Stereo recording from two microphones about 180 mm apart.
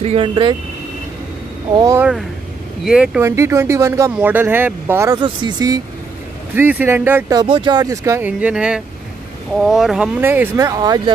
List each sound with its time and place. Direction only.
0.0 s speech: 30° right (ahead or behind)
1.8 s speech: 15° right (ahead or behind)
2.8 s speech: 5° right (ahead or behind)
3.3 s speech: 15° right (ahead or behind)
5.2 s speech: 25° right (ahead or behind)
6.5 s speech: 10° right (ahead or behind)